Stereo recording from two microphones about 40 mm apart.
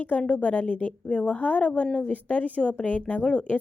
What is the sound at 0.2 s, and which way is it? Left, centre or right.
Speech, left.